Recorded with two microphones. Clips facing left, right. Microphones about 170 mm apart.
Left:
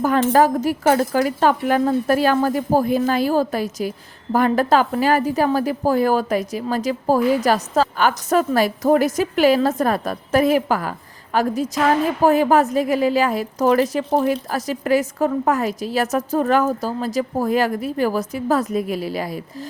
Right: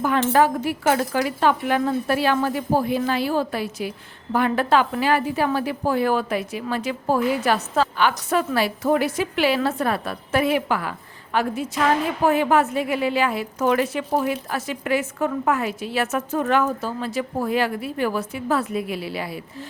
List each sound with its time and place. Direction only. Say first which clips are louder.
0.0 s a woman's voice: left 3 dB; 40° left (ahead or behind)